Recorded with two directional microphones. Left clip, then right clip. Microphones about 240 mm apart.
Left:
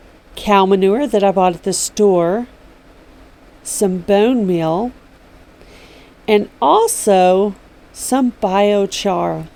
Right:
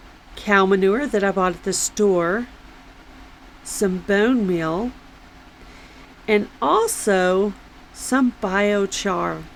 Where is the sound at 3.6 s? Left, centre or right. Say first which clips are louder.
Left 5 dB; centre.